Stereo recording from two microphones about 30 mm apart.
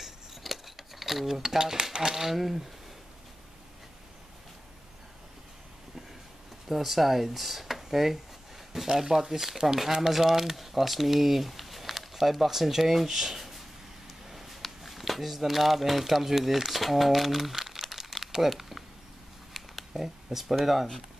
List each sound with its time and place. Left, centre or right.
0.0 s scissors: centre
1.3 s speech: centre
6.7 s speech: centre
17.6 s crumpling: centre
18.5 s a sound: centre